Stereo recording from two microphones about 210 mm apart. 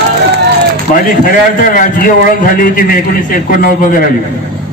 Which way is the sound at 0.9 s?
40° left (ahead or behind).